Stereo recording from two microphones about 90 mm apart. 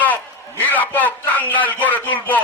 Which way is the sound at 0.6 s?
20° left (ahead or behind).